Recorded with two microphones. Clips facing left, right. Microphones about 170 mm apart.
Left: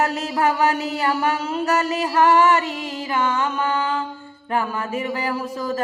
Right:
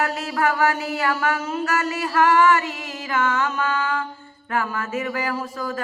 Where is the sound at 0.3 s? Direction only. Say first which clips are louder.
Left 1 dB; 20° left (ahead or behind).